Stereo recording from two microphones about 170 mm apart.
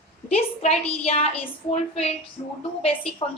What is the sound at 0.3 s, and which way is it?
A woman's voice, 40° left (ahead or behind).